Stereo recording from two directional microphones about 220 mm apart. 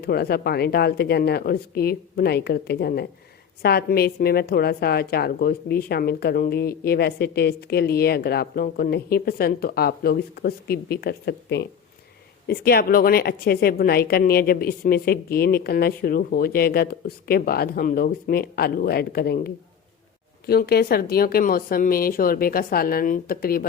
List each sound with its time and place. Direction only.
0.0 s a woman's voice: 45° left (ahead or behind)